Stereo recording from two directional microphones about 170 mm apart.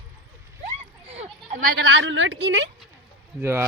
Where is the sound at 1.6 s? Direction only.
90° right.